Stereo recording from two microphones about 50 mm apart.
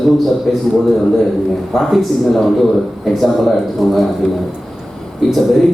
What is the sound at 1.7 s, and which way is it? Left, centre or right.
Speech, centre.